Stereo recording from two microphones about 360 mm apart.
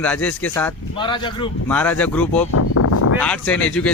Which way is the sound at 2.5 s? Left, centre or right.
Left.